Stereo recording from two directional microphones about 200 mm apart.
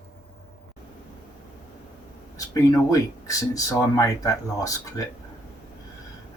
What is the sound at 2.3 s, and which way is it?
Speech, 15° left (ahead or behind).